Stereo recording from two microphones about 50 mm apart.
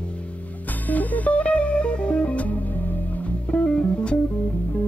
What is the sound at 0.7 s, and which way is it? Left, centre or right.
Music, left.